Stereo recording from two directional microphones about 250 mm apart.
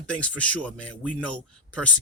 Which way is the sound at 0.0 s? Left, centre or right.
Centre.